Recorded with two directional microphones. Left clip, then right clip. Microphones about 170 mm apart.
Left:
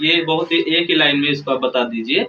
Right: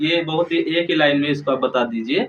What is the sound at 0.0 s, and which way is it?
Speech, 15° right (ahead or behind).